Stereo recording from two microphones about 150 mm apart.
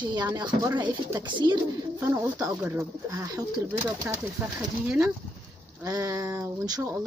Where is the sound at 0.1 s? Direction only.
25° right (ahead or behind).